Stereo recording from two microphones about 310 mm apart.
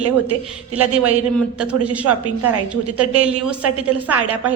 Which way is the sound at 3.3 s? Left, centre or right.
Right.